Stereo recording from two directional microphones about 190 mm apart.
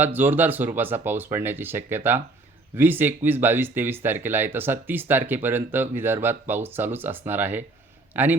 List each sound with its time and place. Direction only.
0.0 s a man's voice: 10° right (ahead or behind)